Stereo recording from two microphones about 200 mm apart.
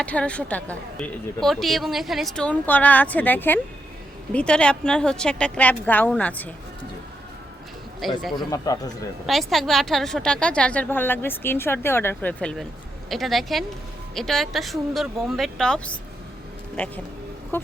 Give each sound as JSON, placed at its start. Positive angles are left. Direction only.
{"t": 0.0, "sound": "a woman's voice", "side_deg": 5}
{"t": 8.0, "sound": "a woman's voice", "side_deg": 0}
{"t": 8.4, "sound": "speech", "side_deg": 15}
{"t": 9.2, "sound": "a woman's voice", "side_deg": 0}